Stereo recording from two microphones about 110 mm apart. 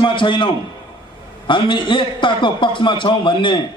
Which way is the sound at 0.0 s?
50° left (ahead or behind).